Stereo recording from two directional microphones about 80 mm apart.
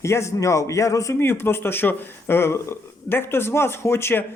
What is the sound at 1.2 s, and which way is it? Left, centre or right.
Speech, left.